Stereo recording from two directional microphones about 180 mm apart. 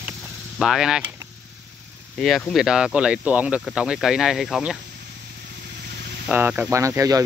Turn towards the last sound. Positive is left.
turn(degrees=-20)  # may be behind; listen again after turning